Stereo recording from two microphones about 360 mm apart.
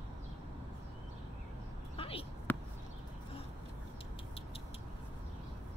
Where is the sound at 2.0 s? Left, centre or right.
Centre.